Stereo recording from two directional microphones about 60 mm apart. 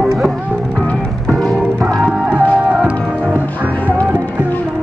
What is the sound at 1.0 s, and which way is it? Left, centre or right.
Music, centre.